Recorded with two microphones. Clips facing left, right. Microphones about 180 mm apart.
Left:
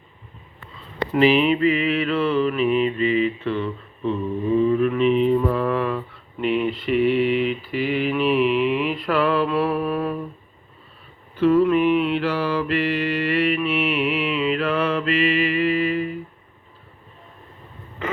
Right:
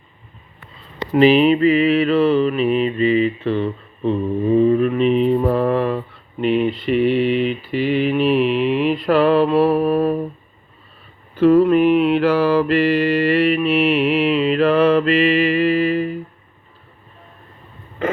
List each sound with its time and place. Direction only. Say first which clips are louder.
1.1 s mantra: right 5 dB; 30° right (ahead or behind)
4.5 s mantra: right 4 dB; 45° right (ahead or behind)
5.1 s mantra: right 2 dB; 70° right (ahead or behind)
5.4 s mantra: right 4 dB; 35° right (ahead or behind)
11.3 s mantra: right 4 dB; 40° right (ahead or behind)